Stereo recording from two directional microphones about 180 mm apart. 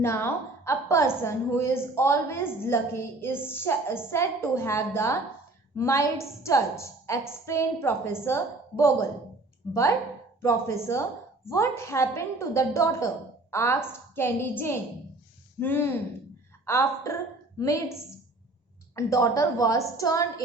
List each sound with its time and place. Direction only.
0.0 s a woman's voice: 15° left (ahead or behind)
18.9 s a woman's voice: 15° left (ahead or behind)